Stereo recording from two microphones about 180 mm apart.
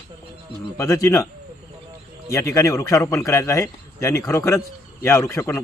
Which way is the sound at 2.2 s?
15° left (ahead or behind).